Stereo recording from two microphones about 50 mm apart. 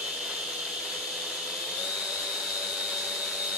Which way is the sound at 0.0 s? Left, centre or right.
Centre.